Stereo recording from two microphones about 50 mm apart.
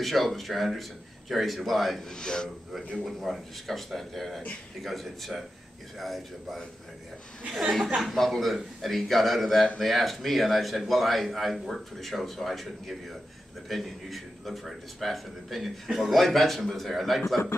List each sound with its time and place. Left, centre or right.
0.0 s a man's voice: centre
3.1 s a man's voice: centre
7.9 s a man's voice: centre